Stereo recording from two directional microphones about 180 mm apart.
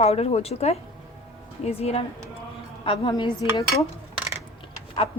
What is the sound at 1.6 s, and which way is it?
A woman's voice, 35° left (ahead or behind).